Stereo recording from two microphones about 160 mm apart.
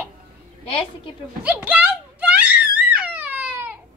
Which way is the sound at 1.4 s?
10° right (ahead or behind).